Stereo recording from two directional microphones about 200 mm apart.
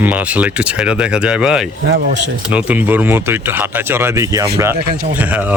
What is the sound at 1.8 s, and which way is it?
Speech, 55° right (ahead or behind).